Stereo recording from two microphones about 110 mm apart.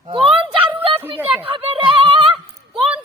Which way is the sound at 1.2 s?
15° right (ahead or behind).